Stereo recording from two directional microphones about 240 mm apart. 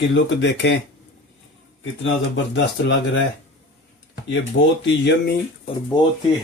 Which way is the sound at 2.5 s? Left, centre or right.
Left.